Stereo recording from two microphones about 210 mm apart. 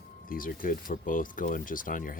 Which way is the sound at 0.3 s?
40° left (ahead or behind).